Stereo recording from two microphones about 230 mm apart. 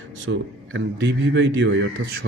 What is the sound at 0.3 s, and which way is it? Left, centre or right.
A man's voice, right.